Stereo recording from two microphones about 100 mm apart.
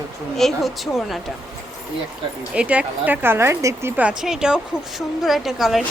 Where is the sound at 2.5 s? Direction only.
10° right (ahead or behind).